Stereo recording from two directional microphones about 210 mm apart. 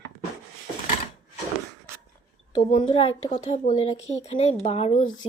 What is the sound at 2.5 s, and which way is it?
Speech, 25° left (ahead or behind).